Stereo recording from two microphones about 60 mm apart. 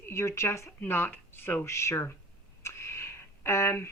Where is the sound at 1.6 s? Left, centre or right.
Left.